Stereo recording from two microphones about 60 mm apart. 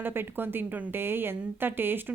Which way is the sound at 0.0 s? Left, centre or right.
Right.